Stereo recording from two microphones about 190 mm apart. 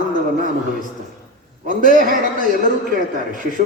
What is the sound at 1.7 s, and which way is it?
A man's voice, 45° right (ahead or behind).